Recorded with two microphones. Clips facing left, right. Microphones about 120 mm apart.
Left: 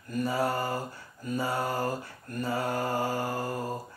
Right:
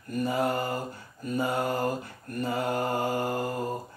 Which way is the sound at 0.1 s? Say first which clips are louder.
Right 1 dB; 20° right (ahead or behind).